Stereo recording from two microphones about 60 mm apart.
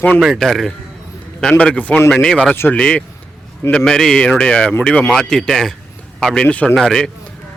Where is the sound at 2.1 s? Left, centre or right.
Centre.